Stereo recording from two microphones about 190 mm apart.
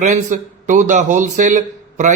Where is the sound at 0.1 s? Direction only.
40° right (ahead or behind).